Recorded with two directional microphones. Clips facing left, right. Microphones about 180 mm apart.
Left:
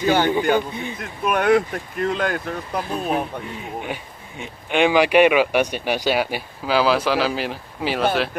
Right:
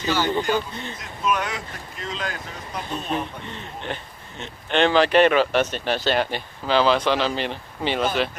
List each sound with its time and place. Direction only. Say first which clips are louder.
0.0 s speech: left 5 dB; 55° left (ahead or behind)
3.4 s speech: left 3 dB; 5° left (ahead or behind)